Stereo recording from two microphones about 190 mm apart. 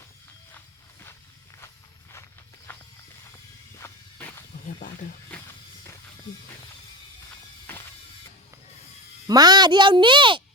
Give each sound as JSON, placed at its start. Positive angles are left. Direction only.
{"t": 2.7, "sound": "walk", "side_deg": 10}
{"t": 3.8, "sound": "a sound", "side_deg": 15}
{"t": 9.2, "sound": "speech", "side_deg": -20}